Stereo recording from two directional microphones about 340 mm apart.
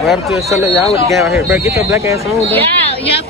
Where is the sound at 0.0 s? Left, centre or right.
Centre.